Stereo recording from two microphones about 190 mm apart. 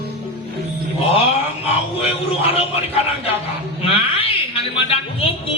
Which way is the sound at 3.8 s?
30° left (ahead or behind).